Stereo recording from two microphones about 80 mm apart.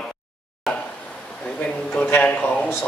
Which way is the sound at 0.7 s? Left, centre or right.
Centre.